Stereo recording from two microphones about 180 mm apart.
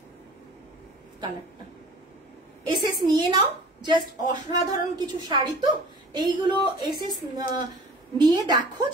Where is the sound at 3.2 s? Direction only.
25° right (ahead or behind).